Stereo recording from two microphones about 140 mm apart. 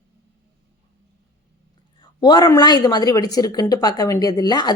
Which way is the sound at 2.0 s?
30° left (ahead or behind).